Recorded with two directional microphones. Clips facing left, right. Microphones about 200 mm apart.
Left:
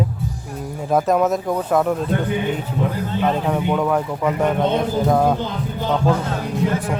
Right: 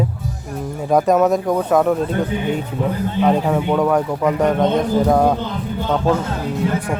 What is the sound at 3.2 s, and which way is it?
Speech, 10° right (ahead or behind).